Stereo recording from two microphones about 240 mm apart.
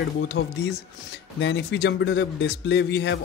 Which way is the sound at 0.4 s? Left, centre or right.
Left.